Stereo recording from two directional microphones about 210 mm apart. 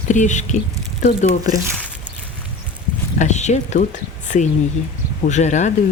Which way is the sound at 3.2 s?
35° left (ahead or behind).